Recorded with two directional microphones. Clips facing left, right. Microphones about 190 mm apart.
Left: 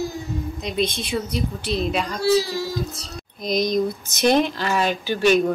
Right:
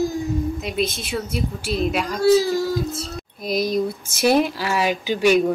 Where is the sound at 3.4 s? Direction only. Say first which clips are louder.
Even; 5° right (ahead or behind).